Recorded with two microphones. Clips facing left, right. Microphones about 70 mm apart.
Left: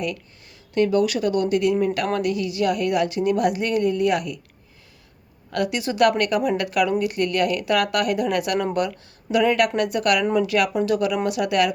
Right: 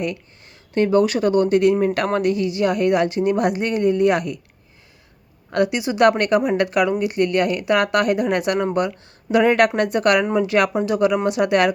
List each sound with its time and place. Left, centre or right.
0.7 s a woman's voice: right
5.5 s speech: right
6.1 s a woman's voice: right
9.3 s a woman's voice: right